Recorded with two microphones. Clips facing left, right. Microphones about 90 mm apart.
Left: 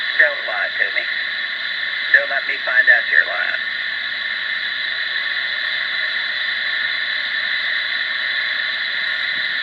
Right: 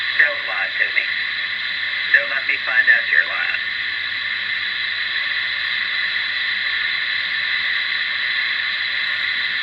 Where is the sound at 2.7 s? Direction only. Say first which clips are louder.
Left 2 dB; 25° left (ahead or behind).